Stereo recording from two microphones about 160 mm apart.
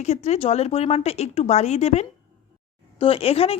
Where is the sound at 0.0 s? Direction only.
45° left (ahead or behind).